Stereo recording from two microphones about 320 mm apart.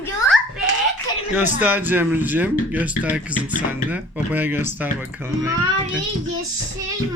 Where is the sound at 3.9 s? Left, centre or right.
Centre.